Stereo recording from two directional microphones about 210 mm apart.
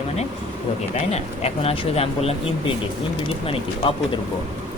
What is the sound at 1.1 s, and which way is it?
Speech, 30° left (ahead or behind).